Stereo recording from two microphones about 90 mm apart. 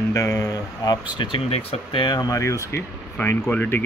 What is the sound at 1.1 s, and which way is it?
Speech, 75° left (ahead or behind).